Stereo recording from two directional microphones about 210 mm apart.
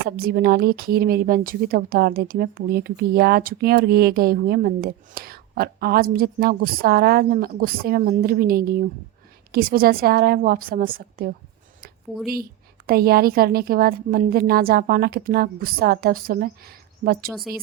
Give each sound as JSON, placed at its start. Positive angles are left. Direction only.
{"t": 0.2, "sound": "a woman's voice", "side_deg": -45}
{"t": 12.9, "sound": "a woman's voice", "side_deg": -45}